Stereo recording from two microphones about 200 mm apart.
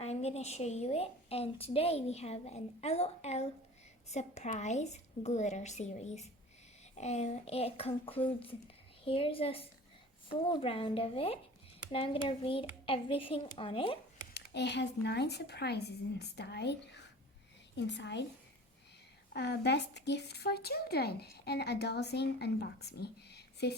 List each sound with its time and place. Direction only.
0.0 s a woman's voice: 30° left (ahead or behind)
14.3 s speech: 60° left (ahead or behind)
19.3 s speech: 55° left (ahead or behind)